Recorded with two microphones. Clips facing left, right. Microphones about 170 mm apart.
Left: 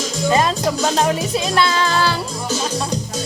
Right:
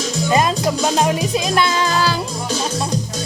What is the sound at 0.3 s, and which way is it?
Music, 15° right (ahead or behind).